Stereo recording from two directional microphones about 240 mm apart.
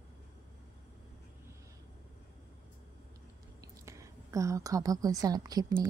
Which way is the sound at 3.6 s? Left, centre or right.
Centre.